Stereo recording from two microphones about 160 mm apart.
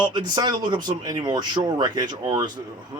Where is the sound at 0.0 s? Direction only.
30° right (ahead or behind).